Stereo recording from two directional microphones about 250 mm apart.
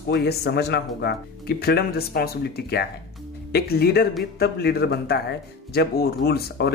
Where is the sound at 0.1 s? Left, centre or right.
Left.